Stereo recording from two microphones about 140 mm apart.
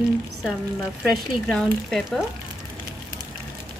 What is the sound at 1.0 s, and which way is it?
Speech, 5° left (ahead or behind).